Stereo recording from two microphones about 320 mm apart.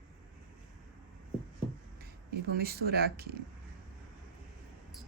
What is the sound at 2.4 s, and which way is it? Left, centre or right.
Speech, right.